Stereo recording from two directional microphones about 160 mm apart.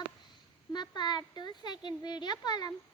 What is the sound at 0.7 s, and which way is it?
Speech, 30° left (ahead or behind).